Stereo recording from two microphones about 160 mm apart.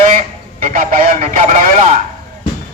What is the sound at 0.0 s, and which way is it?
Radio, 55° right (ahead or behind).